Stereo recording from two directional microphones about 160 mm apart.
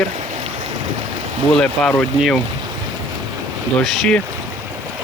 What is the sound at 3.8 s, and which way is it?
Speech, 5° left (ahead or behind).